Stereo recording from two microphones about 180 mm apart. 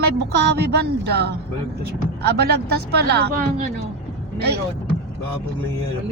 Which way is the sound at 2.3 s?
65° right (ahead or behind).